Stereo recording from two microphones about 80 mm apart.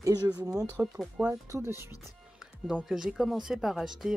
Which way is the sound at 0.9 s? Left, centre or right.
Centre.